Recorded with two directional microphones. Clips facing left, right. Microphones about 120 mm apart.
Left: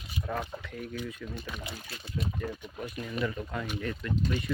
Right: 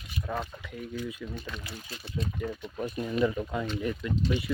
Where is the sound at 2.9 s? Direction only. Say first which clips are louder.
Right 6 dB; 25° right (ahead or behind).